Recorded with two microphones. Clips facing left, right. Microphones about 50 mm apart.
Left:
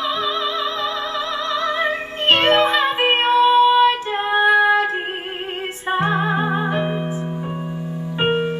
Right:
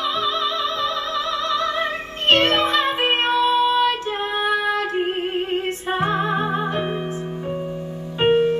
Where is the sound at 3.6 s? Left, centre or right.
Centre.